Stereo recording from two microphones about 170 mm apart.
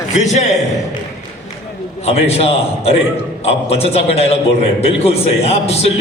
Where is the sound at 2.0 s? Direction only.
35° left (ahead or behind).